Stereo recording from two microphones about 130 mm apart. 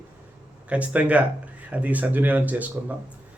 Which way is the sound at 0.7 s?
10° right (ahead or behind).